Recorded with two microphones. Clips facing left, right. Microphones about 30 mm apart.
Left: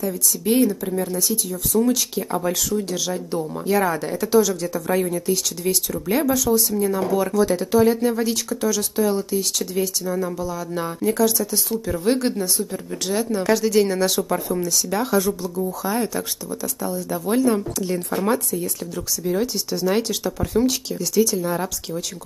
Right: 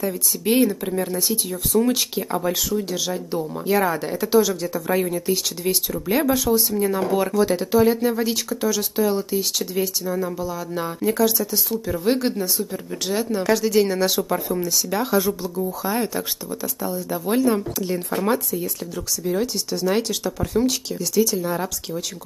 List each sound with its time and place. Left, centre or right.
0.0 s speech: right
2.1 s speech: centre
5.9 s speech: centre
6.2 s speech: right
7.7 s speech: centre